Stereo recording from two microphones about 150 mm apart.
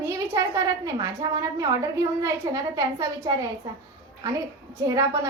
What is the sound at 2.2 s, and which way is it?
A woman's voice, 20° right (ahead or behind).